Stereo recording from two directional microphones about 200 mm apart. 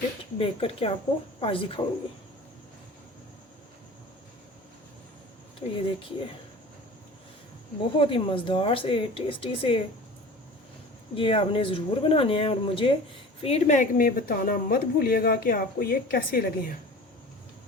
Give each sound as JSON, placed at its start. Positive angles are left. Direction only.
{"t": 0.3, "sound": "speech", "side_deg": 30}
{"t": 5.7, "sound": "speech", "side_deg": 25}
{"t": 7.9, "sound": "speech", "side_deg": 25}
{"t": 11.1, "sound": "a woman's voice", "side_deg": 25}